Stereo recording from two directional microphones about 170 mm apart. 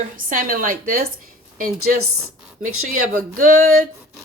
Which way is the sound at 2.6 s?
50° right (ahead or behind).